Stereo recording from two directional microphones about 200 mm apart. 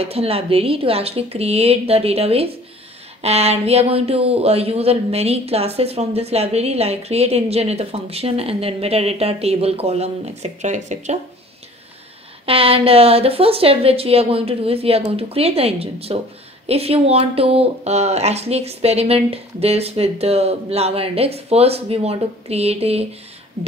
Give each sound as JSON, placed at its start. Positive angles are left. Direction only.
{"t": 0.0, "sound": "a woman's voice", "side_deg": -30}
{"t": 12.4, "sound": "a woman's voice", "side_deg": -30}